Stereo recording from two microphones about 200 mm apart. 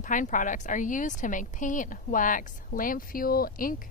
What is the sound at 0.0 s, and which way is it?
A woman's voice, 40° left (ahead or behind).